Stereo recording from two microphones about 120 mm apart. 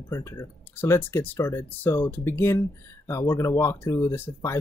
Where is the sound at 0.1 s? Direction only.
25° left (ahead or behind).